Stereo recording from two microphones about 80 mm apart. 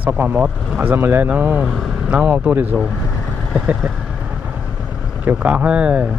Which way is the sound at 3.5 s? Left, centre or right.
Centre.